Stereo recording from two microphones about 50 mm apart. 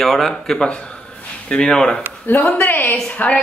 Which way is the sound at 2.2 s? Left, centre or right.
Left.